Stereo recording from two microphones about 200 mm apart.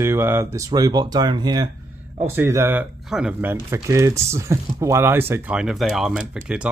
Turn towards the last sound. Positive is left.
turn(degrees=-5)  # may be behind; listen again after turning